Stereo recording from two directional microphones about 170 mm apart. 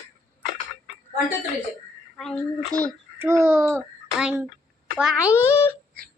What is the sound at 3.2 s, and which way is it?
Speech, 15° right (ahead or behind).